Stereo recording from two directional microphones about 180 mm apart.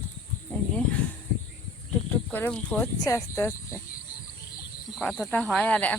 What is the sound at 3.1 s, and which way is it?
Speech, 15° left (ahead or behind).